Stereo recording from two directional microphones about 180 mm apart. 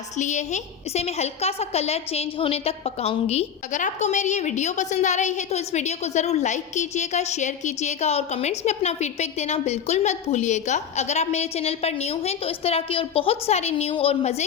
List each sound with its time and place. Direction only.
0.2 s a woman's voice: 40° left (ahead or behind)